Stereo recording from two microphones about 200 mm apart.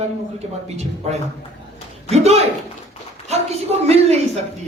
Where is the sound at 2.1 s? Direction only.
30° right (ahead or behind).